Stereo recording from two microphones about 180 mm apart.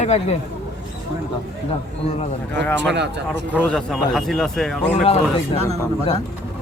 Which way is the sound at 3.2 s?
10° left (ahead or behind).